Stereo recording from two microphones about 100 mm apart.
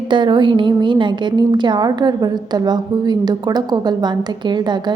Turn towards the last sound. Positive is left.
turn(degrees=-45)  # may be behind; listen again after turning